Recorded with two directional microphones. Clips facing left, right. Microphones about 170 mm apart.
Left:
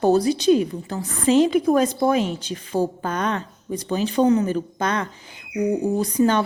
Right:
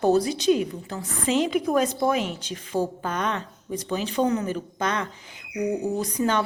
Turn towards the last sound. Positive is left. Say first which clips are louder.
# left 5 dB
turn(degrees=35)  # may be behind; listen again after turning